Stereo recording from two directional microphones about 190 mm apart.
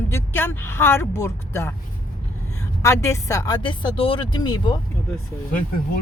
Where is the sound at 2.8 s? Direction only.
15° left (ahead or behind).